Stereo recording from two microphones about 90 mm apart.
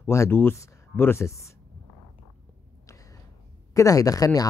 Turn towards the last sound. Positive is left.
turn(degrees=40)  # may be behind; listen again after turning